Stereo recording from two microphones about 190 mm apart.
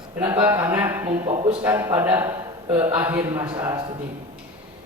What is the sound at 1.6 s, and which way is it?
A man's voice, 10° right (ahead or behind).